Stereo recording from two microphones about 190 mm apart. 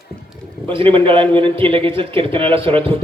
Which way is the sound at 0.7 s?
30° right (ahead or behind).